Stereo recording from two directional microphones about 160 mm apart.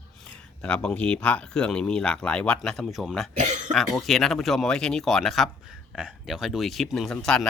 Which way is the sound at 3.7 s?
Centre (ahead or behind).